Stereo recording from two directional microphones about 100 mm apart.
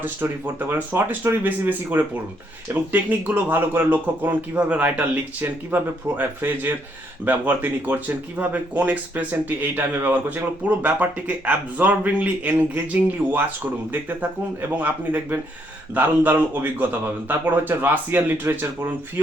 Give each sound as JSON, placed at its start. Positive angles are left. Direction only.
{"t": 0.7, "sound": "speech", "side_deg": -20}